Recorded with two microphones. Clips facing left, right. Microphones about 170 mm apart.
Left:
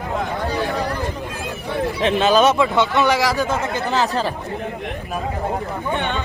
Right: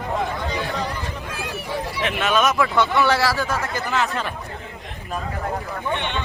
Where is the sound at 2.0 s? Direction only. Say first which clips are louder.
Left 6 dB; 30° left (ahead or behind).